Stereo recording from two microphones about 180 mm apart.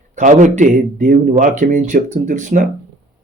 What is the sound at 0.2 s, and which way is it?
Speech, 45° right (ahead or behind).